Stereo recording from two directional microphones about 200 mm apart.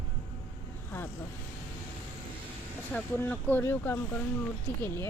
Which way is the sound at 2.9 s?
5° left (ahead or behind).